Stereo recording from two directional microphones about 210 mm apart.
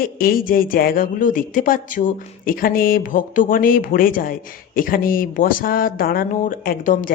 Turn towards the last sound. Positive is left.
turn(degrees=40)  # may be behind; listen again after turning